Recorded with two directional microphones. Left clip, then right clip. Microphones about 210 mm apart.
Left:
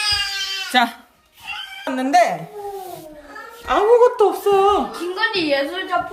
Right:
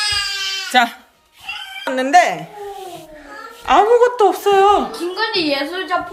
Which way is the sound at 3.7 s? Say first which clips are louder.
Right 2 dB; centre (ahead or behind).